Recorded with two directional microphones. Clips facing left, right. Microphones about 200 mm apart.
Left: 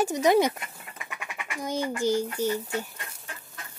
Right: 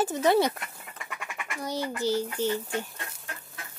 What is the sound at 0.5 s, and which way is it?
Duck, 5° left (ahead or behind).